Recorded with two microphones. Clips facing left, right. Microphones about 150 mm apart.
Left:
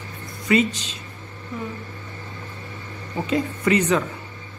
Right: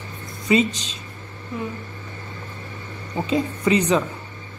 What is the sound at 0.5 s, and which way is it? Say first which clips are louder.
Speech: right 1 dB; 20° right (ahead or behind).